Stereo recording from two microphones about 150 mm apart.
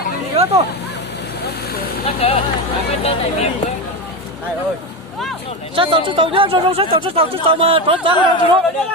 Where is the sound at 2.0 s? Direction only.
40° left (ahead or behind).